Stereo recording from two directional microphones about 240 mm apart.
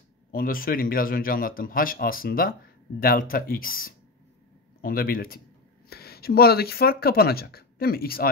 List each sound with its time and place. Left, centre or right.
0.3 s speech: left